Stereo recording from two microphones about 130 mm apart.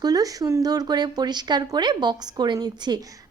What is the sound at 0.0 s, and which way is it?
A woman's voice, 30° right (ahead or behind).